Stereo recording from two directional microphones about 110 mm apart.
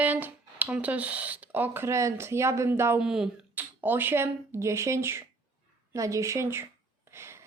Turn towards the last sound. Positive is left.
turn(degrees=-25)  # may be behind; listen again after turning